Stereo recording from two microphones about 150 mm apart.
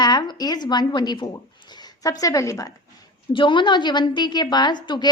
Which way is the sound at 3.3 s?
35° left (ahead or behind).